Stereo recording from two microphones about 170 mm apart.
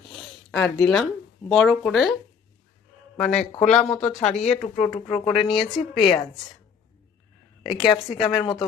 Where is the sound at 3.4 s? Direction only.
45° left (ahead or behind).